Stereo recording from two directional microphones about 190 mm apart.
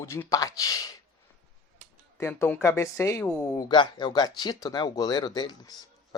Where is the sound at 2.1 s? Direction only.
10° left (ahead or behind).